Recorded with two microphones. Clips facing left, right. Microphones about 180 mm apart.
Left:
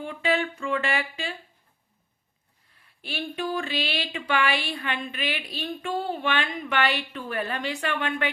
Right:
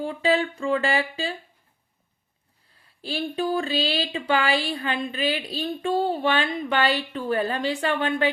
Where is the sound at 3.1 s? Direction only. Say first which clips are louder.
Right 4 dB; 30° right (ahead or behind).